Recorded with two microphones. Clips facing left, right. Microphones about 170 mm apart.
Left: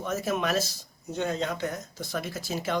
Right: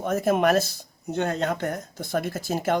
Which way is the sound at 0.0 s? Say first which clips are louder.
Right 7 dB; 55° right (ahead or behind).